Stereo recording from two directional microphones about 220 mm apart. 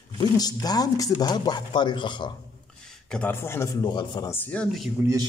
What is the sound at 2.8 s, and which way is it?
A man's voice, 5° left (ahead or behind).